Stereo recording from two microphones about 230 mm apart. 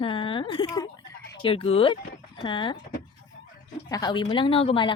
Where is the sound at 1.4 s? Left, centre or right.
Left.